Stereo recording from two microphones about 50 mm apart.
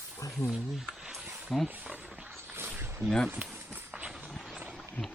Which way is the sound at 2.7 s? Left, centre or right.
Right.